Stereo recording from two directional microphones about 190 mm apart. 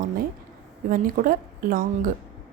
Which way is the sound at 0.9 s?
45° right (ahead or behind).